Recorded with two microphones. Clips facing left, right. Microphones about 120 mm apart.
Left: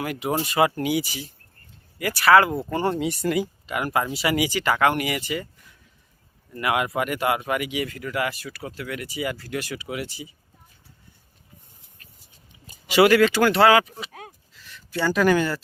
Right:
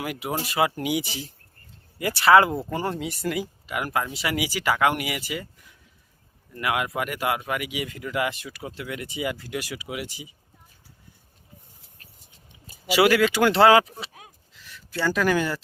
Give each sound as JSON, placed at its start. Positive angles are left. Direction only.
{"t": 0.0, "sound": "speech", "side_deg": -5}
{"t": 0.8, "sound": "speech", "side_deg": -15}
{"t": 2.7, "sound": "speech", "side_deg": 0}
{"t": 4.4, "sound": "speech", "side_deg": -10}
{"t": 6.5, "sound": "speech", "side_deg": 0}
{"t": 7.9, "sound": "speech", "side_deg": -20}
{"t": 12.9, "sound": "speech", "side_deg": -5}
{"t": 13.5, "sound": "speech", "side_deg": -25}
{"t": 14.1, "sound": "a sound", "side_deg": 70}
{"t": 14.9, "sound": "speech", "side_deg": 0}